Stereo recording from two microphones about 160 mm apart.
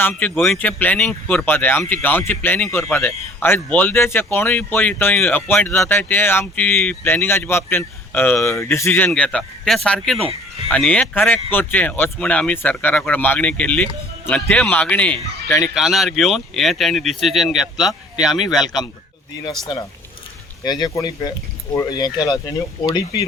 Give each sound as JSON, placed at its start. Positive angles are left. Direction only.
{"t": 0.0, "sound": "speech", "side_deg": 10}
{"t": 18.5, "sound": "speech", "side_deg": 25}
{"t": 20.7, "sound": "speech", "side_deg": 25}